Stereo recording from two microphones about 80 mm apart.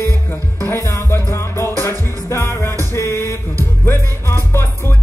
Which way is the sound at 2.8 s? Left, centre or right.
Left.